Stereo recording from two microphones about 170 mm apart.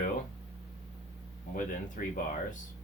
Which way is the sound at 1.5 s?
50° left (ahead or behind).